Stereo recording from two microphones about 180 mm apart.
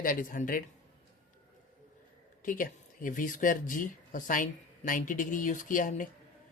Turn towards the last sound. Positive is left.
turn(degrees=45)  # may be behind; listen again after turning